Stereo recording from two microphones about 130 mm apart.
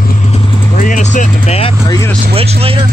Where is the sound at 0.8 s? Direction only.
70° left (ahead or behind); by 1.7 s 55° left (ahead or behind).